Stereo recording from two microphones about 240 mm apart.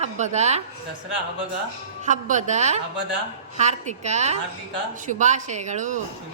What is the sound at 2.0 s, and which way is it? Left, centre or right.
A woman's voice, right.